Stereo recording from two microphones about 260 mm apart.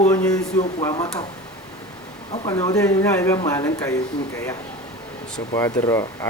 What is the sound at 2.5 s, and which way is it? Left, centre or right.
Speech, centre.